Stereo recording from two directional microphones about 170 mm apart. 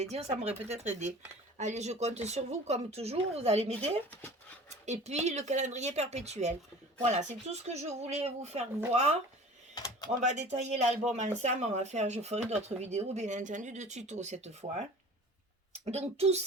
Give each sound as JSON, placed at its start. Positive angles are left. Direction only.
{"t": 0.0, "sound": "speech", "side_deg": -40}
{"t": 9.7, "sound": "a sound", "side_deg": 20}
{"t": 10.2, "sound": "speech", "side_deg": -45}
{"t": 15.7, "sound": "speech", "side_deg": -40}